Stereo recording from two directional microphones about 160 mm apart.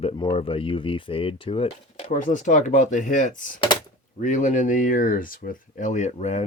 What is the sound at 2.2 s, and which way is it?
Speech, 50° left (ahead or behind).